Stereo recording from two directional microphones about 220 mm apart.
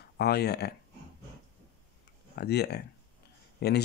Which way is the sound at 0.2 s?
45° left (ahead or behind).